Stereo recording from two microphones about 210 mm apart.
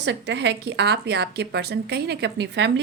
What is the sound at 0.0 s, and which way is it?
A woman's voice, 55° right (ahead or behind).